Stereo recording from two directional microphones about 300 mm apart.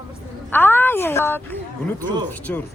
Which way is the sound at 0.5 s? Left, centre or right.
Centre.